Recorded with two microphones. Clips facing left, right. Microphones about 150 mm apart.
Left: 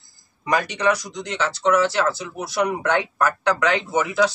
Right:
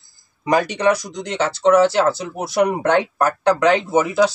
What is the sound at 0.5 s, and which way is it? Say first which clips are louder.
Speech: right 4 dB; 35° right (ahead or behind).